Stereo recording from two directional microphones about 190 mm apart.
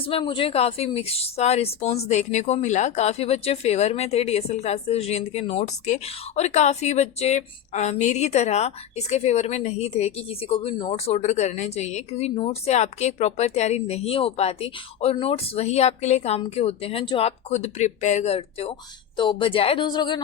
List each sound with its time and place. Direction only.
0.0 s a woman's voice: 30° left (ahead or behind)